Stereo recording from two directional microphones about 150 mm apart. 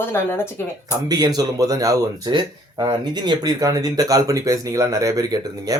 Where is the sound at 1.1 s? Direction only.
25° right (ahead or behind).